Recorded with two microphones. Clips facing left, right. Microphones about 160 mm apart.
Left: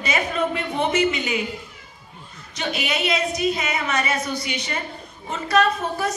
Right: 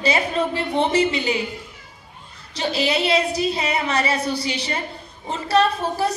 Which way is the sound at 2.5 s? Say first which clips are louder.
Right 4 dB; 30° right (ahead or behind).